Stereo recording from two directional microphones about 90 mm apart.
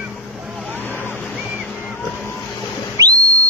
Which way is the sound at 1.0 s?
25° left (ahead or behind).